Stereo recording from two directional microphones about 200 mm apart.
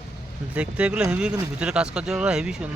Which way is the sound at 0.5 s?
5° right (ahead or behind).